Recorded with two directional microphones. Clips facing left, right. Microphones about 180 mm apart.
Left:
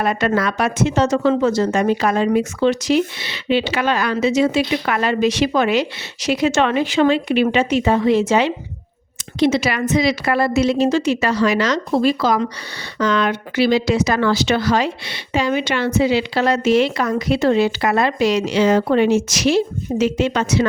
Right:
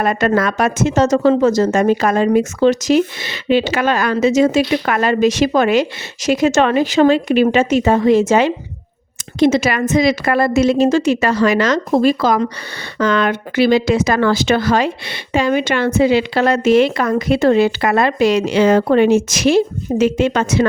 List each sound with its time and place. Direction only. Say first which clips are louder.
0.0 s speech: right 3 dB; 45° right (ahead or behind)